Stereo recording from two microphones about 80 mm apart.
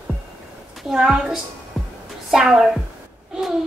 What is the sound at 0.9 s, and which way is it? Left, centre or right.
A woman's voice, centre.